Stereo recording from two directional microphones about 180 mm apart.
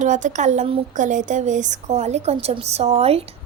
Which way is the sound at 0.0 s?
45° right (ahead or behind).